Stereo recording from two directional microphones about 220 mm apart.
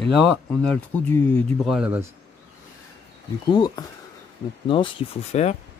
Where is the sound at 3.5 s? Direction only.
20° left (ahead or behind).